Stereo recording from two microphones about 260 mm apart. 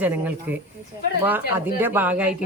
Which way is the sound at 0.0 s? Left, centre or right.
Centre.